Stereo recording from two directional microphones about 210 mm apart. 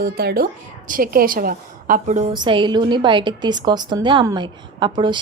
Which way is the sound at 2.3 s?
20° right (ahead or behind).